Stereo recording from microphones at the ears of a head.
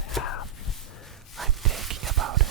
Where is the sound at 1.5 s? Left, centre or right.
Right.